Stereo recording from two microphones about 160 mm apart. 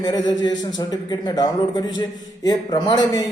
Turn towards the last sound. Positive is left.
turn(degrees=25)  # may be behind; listen again after turning